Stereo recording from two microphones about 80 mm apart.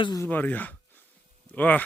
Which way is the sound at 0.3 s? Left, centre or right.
Left.